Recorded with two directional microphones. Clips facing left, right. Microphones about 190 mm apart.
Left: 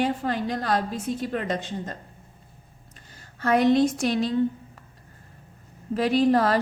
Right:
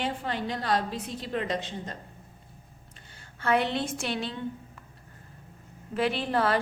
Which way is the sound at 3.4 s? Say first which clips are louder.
Left 7 dB; 40° left (ahead or behind).